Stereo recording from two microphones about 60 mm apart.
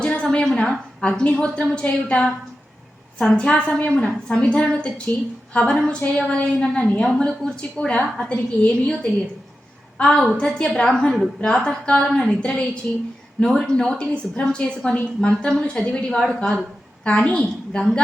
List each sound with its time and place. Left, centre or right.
0.0 s a sound: centre
0.4 s a woman's voice: centre
10.0 s a woman's voice: centre
16.2 s speech: centre
17.0 s a woman's voice: centre